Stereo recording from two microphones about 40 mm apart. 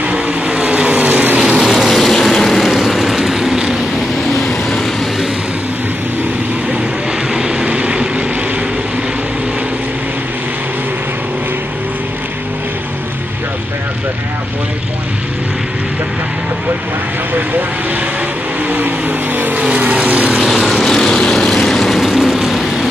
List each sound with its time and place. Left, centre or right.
0.1 s vehicle: right
1.4 s vehicle: centre
1.7 s vehicle: centre
4.5 s vehicle: centre
7.3 s vehicle: right
18.7 s vehicle: right
20.4 s vehicle: centre
22.1 s vehicle: centre